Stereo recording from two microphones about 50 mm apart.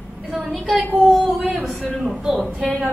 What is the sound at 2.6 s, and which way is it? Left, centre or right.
Speech, right.